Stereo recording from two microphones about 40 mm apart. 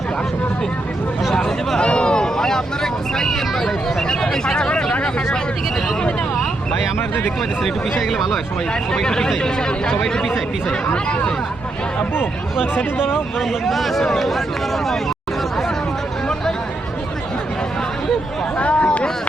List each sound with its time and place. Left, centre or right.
1.4 s a sound: centre
1.8 s vehicle: left
7.6 s speech: centre
9.0 s speech: centre
13.4 s speech: centre
18.5 s a sound: left